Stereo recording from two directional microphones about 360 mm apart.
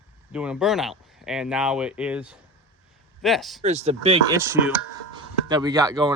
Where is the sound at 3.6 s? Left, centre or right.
Centre.